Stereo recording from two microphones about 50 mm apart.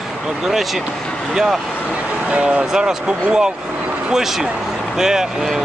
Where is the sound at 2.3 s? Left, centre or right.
Right.